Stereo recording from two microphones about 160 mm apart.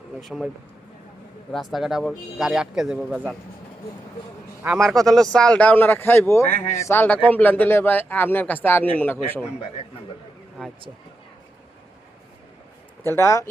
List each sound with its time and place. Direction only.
0.2 s speech: centre (ahead or behind)
1.5 s speech: centre (ahead or behind)
4.8 s speech: centre (ahead or behind)
13.1 s speech: 20° left (ahead or behind)